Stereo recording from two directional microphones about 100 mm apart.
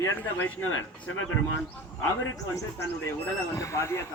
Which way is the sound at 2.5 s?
30° left (ahead or behind).